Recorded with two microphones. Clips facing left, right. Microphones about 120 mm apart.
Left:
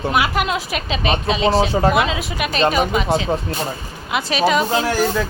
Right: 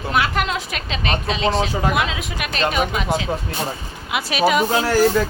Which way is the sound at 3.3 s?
25° left (ahead or behind).